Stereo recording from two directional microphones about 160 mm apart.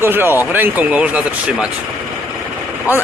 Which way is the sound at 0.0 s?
15° right (ahead or behind).